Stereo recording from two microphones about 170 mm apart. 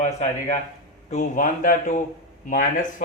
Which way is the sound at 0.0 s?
45° left (ahead or behind).